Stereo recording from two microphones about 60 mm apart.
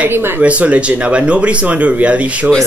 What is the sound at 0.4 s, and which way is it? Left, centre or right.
Speech, right.